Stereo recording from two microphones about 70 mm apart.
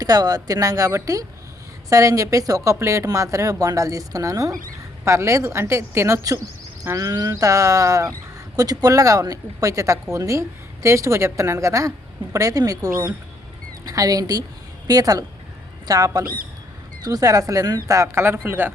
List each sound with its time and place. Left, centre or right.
0.0 s speech: right
5.0 s speech: right
6.9 s speech: right
8.5 s speech: right
17.8 s a man's voice: right